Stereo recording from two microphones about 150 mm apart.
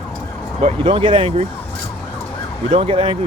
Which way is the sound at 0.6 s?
45° right (ahead or behind).